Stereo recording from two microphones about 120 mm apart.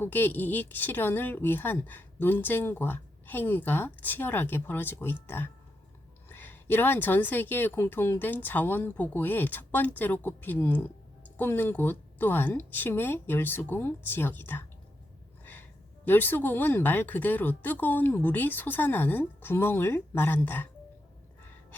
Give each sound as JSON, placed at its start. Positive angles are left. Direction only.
{"t": 0.0, "sound": "a woman's voice", "side_deg": 15}
{"t": 16.0, "sound": "a woman's voice", "side_deg": 15}